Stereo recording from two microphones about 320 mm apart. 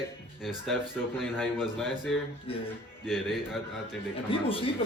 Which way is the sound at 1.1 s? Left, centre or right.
Centre.